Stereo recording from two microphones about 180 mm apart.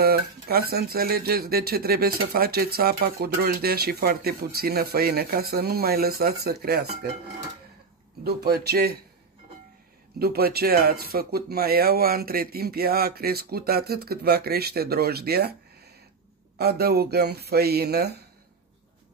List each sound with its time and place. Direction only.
0.0 s speech: 60° right (ahead or behind)
8.2 s speech: 60° right (ahead or behind)
10.1 s speech: 60° right (ahead or behind)
16.5 s speech: 60° right (ahead or behind)